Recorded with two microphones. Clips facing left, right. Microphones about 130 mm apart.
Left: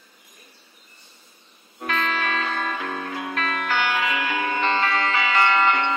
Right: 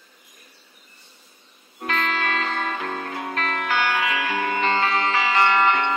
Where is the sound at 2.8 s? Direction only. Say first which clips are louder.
Even; 35° right (ahead or behind).